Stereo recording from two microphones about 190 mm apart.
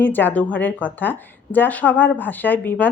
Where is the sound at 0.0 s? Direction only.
10° left (ahead or behind).